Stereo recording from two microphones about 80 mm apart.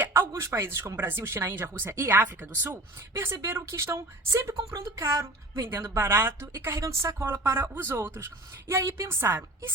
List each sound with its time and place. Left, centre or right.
0.0 s a woman's voice: right
9.0 s speech: right